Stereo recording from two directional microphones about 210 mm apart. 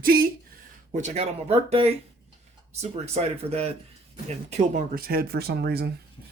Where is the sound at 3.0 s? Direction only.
30° right (ahead or behind); by 5.9 s 50° right (ahead or behind).